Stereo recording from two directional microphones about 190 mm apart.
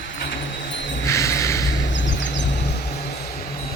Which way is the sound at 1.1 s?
15° left (ahead or behind).